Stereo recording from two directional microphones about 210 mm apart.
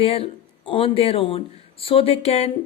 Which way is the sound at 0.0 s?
25° left (ahead or behind).